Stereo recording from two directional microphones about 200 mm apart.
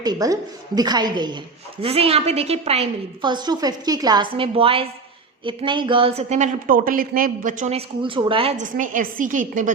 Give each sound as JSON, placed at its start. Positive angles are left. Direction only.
{"t": 0.0, "sound": "a woman's voice", "side_deg": -20}